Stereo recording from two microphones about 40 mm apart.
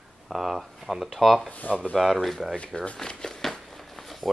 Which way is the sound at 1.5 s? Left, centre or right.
Left.